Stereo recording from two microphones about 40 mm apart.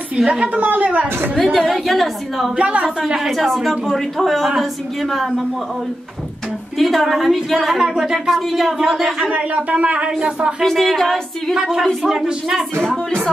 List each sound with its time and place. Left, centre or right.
0.5 s a woman's voice: right
1.4 s a woman's voice: centre
2.5 s a woman's voice: right
3.3 s a woman's voice: centre
6.8 s a woman's voice: centre
9.3 s a woman's voice: right
10.6 s a sound: centre
11.5 s speech: centre